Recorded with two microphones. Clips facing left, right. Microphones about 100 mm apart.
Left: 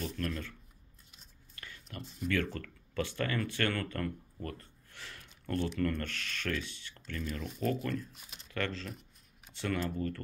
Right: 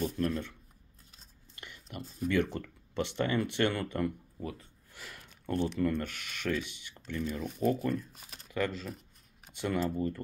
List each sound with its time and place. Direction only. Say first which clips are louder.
0.1 s speech: right 5 dB; 15° right (ahead or behind)
1.6 s a sound: right 2 dB; 15° right (ahead or behind)
2.2 s speech: right 4 dB; 20° right (ahead or behind)
4.4 s speech: right 2 dB; 5° right (ahead or behind)
8.1 s speech: right 2 dB; 40° right (ahead or behind)
8.5 s speech: right 3 dB; 10° right (ahead or behind)